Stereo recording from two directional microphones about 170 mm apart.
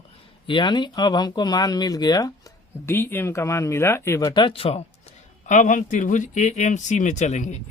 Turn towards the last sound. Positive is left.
turn(degrees=45)  # may be behind; listen again after turning